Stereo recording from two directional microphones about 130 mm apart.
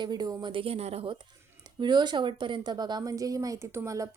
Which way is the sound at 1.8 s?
35° right (ahead or behind).